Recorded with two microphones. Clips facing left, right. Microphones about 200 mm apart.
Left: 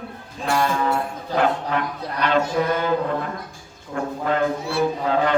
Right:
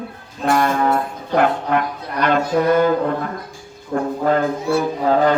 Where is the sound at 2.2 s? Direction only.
50° right (ahead or behind).